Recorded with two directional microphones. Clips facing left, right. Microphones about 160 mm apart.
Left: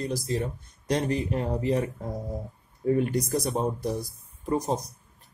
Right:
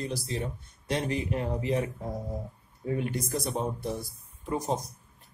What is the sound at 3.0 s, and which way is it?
Speech, 40° left (ahead or behind).